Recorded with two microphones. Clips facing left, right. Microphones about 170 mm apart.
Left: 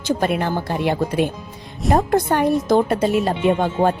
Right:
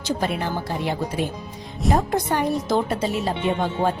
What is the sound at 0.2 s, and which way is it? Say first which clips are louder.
Speech: left 4 dB; 60° left (ahead or behind).